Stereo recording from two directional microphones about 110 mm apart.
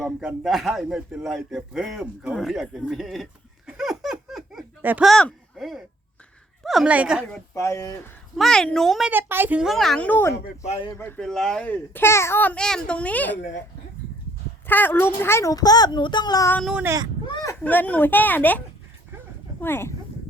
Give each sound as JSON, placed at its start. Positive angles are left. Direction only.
{"t": 0.2, "sound": "speech", "side_deg": -5}
{"t": 3.7, "sound": "laughter", "side_deg": 0}
{"t": 4.8, "sound": "speech", "side_deg": -15}
{"t": 5.0, "sound": "speech", "side_deg": 5}
{"t": 7.5, "sound": "speech", "side_deg": 30}
{"t": 8.4, "sound": "speech", "side_deg": 5}
{"t": 9.0, "sound": "speech", "side_deg": -15}
{"t": 9.6, "sound": "speech", "side_deg": 5}
{"t": 10.1, "sound": "speech", "side_deg": 20}
{"t": 11.2, "sound": "a child's voice", "side_deg": 5}
{"t": 14.7, "sound": "a child's voice", "side_deg": 15}
{"t": 17.6, "sound": "a child's voice", "side_deg": 15}
{"t": 19.6, "sound": "speech", "side_deg": 20}